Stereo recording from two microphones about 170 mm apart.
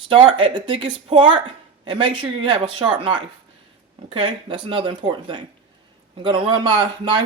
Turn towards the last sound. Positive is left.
turn(degrees=-25)  # may be behind; listen again after turning